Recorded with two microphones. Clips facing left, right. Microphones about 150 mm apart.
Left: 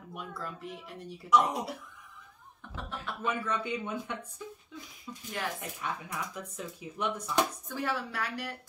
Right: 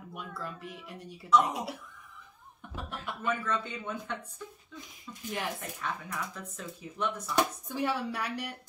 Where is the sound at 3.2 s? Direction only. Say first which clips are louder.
Even; 10° left (ahead or behind).